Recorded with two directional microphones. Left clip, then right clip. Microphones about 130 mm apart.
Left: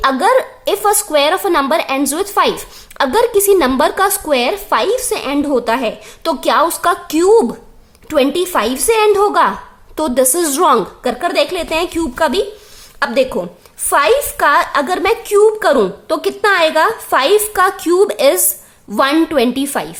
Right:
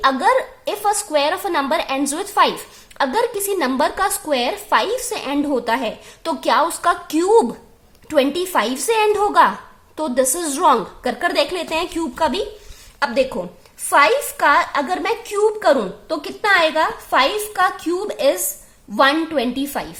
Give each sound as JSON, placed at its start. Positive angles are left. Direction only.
{"t": 0.0, "sound": "a woman's voice", "side_deg": 30}
{"t": 9.9, "sound": "a woman's voice", "side_deg": 40}
{"t": 11.0, "sound": "a woman's voice", "side_deg": 20}